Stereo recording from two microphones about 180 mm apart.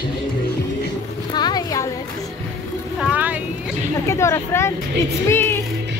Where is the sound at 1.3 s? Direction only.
20° left (ahead or behind).